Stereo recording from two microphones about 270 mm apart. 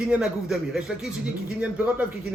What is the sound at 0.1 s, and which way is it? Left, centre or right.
A man's voice, centre.